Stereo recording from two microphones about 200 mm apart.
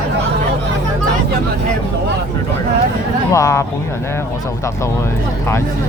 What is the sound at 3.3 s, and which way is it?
Speech, 15° left (ahead or behind).